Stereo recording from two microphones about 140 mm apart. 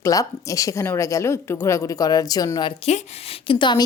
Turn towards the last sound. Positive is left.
turn(degrees=35)  # may be behind; listen again after turning